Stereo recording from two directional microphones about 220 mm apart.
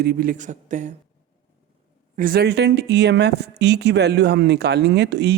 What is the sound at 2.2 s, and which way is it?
Speech, 40° right (ahead or behind).